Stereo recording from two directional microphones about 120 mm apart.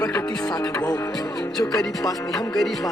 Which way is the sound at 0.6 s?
30° left (ahead or behind).